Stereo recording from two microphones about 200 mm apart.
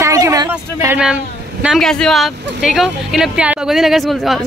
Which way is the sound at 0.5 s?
5° right (ahead or behind).